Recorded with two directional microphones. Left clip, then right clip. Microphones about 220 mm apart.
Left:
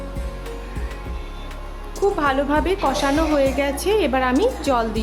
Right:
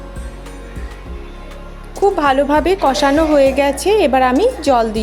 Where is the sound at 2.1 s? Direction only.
20° right (ahead or behind).